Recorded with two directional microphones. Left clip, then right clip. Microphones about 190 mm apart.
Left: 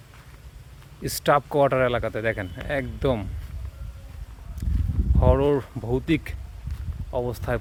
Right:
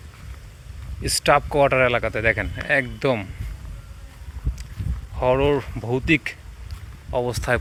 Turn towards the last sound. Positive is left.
turn(degrees=5)  # may be behind; listen again after turning